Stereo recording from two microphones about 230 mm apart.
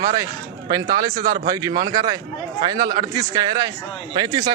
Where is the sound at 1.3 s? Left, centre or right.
Centre.